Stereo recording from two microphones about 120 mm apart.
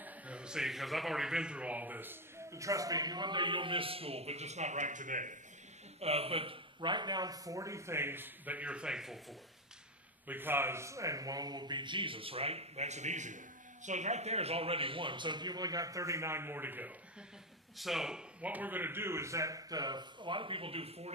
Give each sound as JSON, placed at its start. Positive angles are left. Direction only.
{"t": 0.0, "sound": "speech", "side_deg": -10}
{"t": 5.9, "sound": "speech", "side_deg": -55}
{"t": 10.2, "sound": "a man's voice", "side_deg": -15}
{"t": 13.8, "sound": "a man's voice", "side_deg": -75}
{"t": 17.7, "sound": "speech", "side_deg": 0}